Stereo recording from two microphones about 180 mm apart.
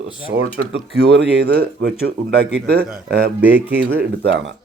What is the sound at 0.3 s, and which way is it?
Speech, 75° right (ahead or behind).